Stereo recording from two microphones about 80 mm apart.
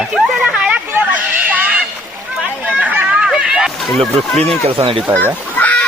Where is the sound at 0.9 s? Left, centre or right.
Centre.